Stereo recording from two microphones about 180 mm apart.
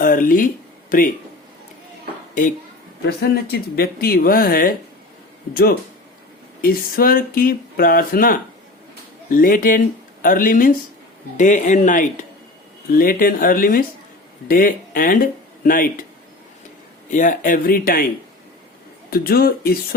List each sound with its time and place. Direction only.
0.0 s a sound: 50° left (ahead or behind)
3.1 s speech: 60° left (ahead or behind)
6.6 s speech: 55° left (ahead or behind)
17.1 s speech: 45° left (ahead or behind)
19.1 s speech: 60° left (ahead or behind)